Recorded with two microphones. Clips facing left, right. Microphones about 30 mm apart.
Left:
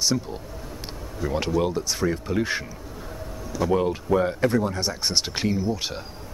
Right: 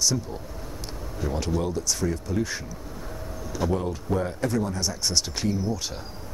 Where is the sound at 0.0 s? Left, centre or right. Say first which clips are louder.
Left 2 dB; left.